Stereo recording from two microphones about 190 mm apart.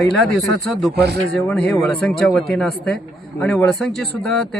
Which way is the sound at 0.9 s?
60° right (ahead or behind).